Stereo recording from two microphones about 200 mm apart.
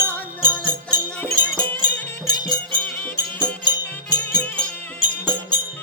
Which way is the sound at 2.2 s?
20° left (ahead or behind).